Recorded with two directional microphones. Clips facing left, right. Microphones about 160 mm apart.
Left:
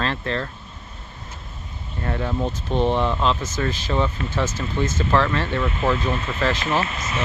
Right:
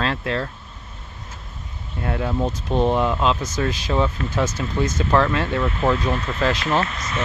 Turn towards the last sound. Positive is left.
turn(degrees=10)  # may be behind; listen again after turning